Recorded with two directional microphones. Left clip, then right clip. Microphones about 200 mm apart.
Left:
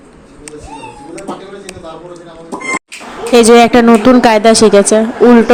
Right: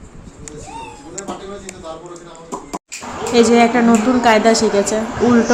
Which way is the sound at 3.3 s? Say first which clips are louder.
Left 7 dB; 45° left (ahead or behind).